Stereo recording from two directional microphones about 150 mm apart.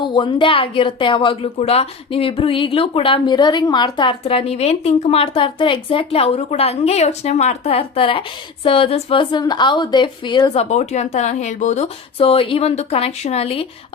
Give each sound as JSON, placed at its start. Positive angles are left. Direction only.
{"t": 0.0, "sound": "a woman's voice", "side_deg": 35}
{"t": 12.2, "sound": "a woman's voice", "side_deg": 35}